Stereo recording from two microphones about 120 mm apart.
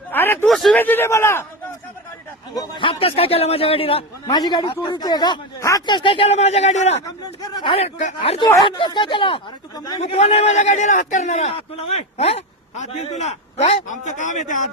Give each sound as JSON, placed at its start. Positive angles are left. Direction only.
{"t": 0.1, "sound": "a sound", "side_deg": 15}
{"t": 0.4, "sound": "a sound", "side_deg": 0}
{"t": 0.8, "sound": "a man's voice", "side_deg": 15}
{"t": 2.6, "sound": "a man's voice", "side_deg": 45}
{"t": 4.3, "sound": "speech", "side_deg": 35}
{"t": 6.2, "sound": "a man's voice", "side_deg": 60}
{"t": 7.0, "sound": "speech", "side_deg": 35}
{"t": 7.8, "sound": "a man's voice", "side_deg": 65}
{"t": 8.2, "sound": "a man's voice", "side_deg": 50}
{"t": 10.0, "sound": "a man's voice", "side_deg": 60}